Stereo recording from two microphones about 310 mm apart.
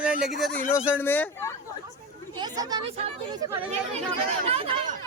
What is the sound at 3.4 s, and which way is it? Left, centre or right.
Speech, centre.